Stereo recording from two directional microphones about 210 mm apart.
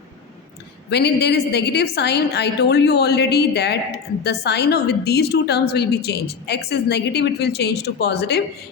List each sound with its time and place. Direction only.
0.9 s a woman's voice: 50° left (ahead or behind)